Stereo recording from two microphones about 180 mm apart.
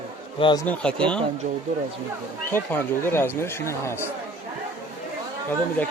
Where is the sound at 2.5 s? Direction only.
10° left (ahead or behind).